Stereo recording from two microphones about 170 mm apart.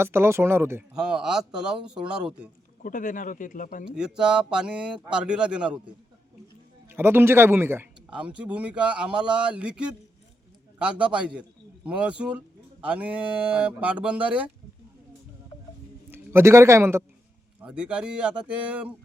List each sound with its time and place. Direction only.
0.0 s a man's voice: 15° right (ahead or behind)
0.9 s a man's voice: 5° right (ahead or behind)
2.8 s speech: 50° left (ahead or behind)
3.8 s a man's voice: 5° right (ahead or behind)
6.8 s a man's voice: 15° right (ahead or behind)
16.0 s a man's voice: 15° right (ahead or behind)